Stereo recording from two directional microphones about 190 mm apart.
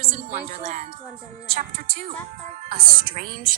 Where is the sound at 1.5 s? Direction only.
45° right (ahead or behind).